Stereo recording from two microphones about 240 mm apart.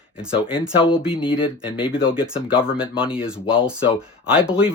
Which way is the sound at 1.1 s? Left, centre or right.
Left.